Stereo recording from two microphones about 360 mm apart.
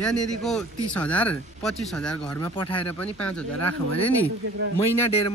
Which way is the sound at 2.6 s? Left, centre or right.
Centre.